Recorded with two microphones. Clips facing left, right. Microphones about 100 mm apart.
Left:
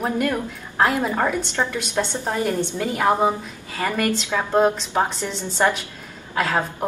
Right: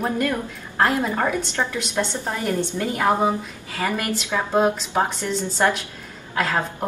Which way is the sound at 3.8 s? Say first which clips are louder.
Left 2 dB; 5° right (ahead or behind).